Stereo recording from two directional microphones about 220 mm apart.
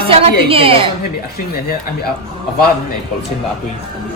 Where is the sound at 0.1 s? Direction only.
25° right (ahead or behind).